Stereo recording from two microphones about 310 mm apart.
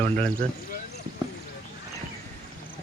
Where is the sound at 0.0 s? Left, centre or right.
Centre.